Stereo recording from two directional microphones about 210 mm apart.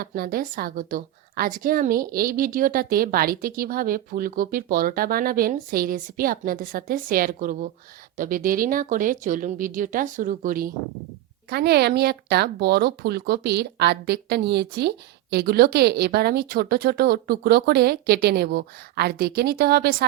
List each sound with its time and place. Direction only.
0.0 s speech: 45° right (ahead or behind)